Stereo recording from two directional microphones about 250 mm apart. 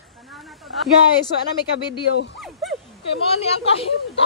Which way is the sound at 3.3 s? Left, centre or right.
Left.